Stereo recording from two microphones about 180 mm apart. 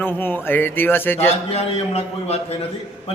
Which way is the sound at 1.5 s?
35° left (ahead or behind).